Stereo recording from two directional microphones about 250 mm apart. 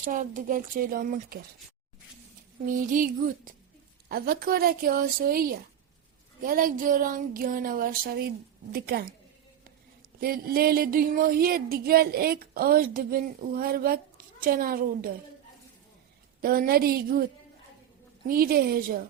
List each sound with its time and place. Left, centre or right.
0.0 s speech: right
2.9 s speech: right
10.2 s speech: right
16.4 s speech: right
18.3 s speech: right